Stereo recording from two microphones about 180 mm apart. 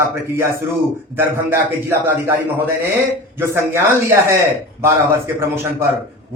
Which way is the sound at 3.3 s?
10° right (ahead or behind).